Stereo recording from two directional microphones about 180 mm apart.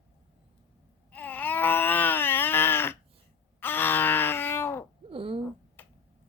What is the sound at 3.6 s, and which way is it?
Groan, 10° left (ahead or behind).